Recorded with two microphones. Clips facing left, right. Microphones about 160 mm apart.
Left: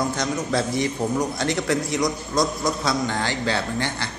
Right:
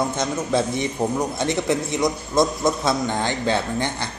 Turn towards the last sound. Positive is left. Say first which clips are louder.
# right 1 dB
turn(degrees=-20)  # may be behind; listen again after turning